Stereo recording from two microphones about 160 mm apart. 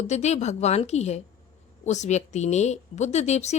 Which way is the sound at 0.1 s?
45° left (ahead or behind).